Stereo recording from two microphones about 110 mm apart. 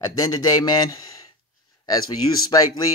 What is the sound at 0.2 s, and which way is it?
Speech, 35° left (ahead or behind).